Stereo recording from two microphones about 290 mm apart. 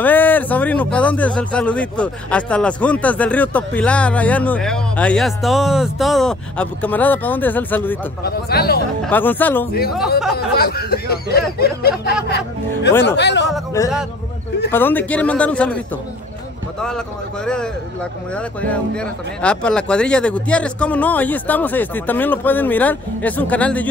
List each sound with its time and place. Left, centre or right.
0.0 s speech: centre
8.2 s speech: left
9.0 s speech: centre
10.3 s speech: left
13.8 s speech: centre
18.3 s speech: centre